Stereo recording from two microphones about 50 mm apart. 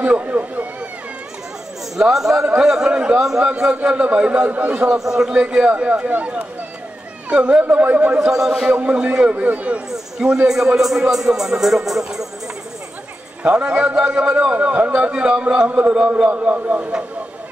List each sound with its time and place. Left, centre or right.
0.0 s a man's voice: right
2.0 s a man's voice: centre; by 4.9 s right
4.9 s a man's voice: centre
7.6 s speech: right
8.2 s a man's voice: centre
9.3 s a man's voice: right
9.8 s a man's voice: centre
13.4 s a man's voice: right
16.3 s speech: right